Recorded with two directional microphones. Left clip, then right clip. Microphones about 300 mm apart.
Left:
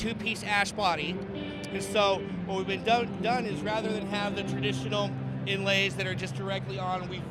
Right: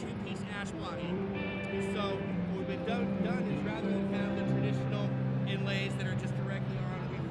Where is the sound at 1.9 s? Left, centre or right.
Left.